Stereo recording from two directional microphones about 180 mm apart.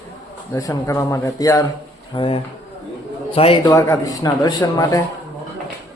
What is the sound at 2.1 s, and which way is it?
A man's voice, 30° left (ahead or behind).